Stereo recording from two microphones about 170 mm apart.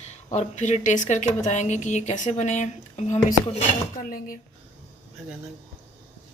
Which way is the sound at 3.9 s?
55° left (ahead or behind).